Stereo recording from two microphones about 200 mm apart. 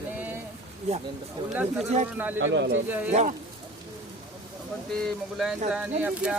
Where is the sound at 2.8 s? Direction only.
10° right (ahead or behind).